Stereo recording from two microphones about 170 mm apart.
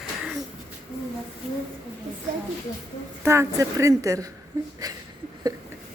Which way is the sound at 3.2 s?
15° right (ahead or behind).